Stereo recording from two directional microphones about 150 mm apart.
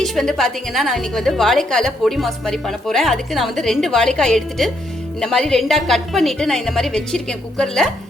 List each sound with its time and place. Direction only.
0.0 s a woman's voice: 5° left (ahead or behind)